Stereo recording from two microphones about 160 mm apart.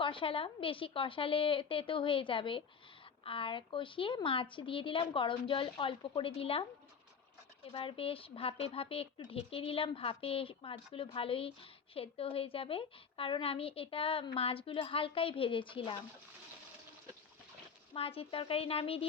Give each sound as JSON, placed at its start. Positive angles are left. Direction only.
{"t": 0.0, "sound": "a woman's voice", "side_deg": 35}
{"t": 17.9, "sound": "a woman's voice", "side_deg": 35}